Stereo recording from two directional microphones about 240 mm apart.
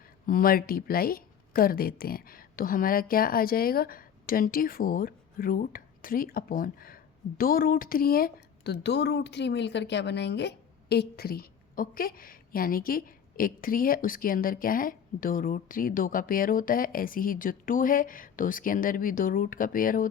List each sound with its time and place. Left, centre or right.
0.3 s speech: left